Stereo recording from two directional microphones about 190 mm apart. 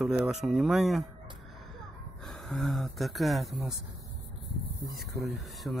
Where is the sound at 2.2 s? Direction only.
Centre (ahead or behind).